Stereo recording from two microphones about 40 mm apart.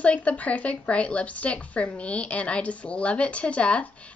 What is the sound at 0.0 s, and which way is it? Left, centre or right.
A woman's voice, left.